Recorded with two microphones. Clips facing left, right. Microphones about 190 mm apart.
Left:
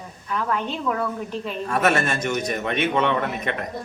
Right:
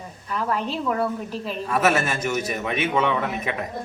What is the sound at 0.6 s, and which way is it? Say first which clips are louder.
A man's voice: right 1 dB; 5° right (ahead or behind).